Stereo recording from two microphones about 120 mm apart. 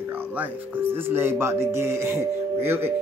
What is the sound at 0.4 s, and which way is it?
Speech, 15° right (ahead or behind).